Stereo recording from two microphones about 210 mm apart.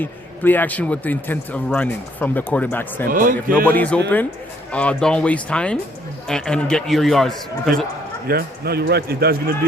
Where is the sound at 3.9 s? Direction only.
5° left (ahead or behind).